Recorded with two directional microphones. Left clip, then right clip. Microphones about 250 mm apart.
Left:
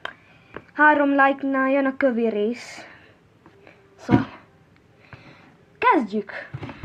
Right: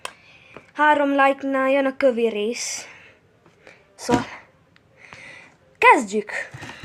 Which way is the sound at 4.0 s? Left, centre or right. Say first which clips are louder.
Right 1 dB; right.